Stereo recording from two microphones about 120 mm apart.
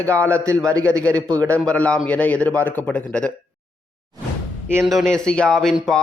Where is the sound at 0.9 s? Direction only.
25° right (ahead or behind).